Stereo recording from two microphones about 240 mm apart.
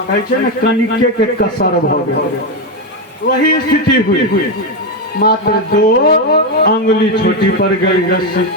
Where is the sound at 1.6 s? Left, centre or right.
Left.